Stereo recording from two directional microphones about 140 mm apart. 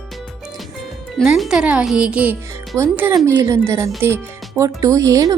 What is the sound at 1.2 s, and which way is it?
Speech, centre (ahead or behind).